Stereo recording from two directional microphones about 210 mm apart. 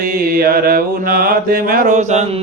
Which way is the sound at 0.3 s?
45° right (ahead or behind).